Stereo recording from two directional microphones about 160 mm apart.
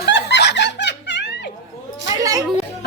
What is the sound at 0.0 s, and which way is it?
Snicker, 90° left.